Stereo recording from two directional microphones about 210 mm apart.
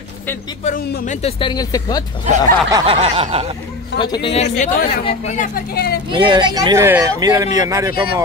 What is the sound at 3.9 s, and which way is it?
Speech, 20° left (ahead or behind).